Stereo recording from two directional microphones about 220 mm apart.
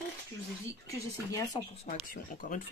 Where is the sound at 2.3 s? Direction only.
35° left (ahead or behind).